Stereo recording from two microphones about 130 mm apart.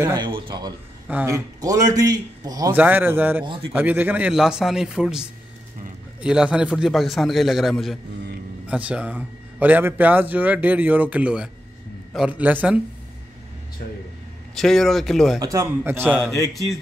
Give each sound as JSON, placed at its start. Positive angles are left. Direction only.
{"t": 0.2, "sound": "a man's voice", "side_deg": -40}
{"t": 2.7, "sound": "a man's voice", "side_deg": -15}
{"t": 8.6, "sound": "a man's voice", "side_deg": -10}
{"t": 14.5, "sound": "a man's voice", "side_deg": 0}
{"t": 15.3, "sound": "a man's voice", "side_deg": -25}